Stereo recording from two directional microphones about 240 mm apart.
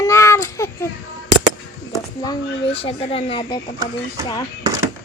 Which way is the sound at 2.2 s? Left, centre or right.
Centre.